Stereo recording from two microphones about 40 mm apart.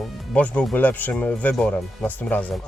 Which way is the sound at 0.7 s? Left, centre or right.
Left.